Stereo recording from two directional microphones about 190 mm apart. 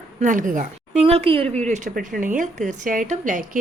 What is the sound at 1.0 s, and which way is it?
A woman's voice, 30° right (ahead or behind).